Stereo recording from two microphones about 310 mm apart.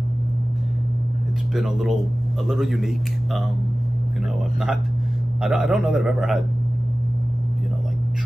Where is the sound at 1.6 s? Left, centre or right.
Centre.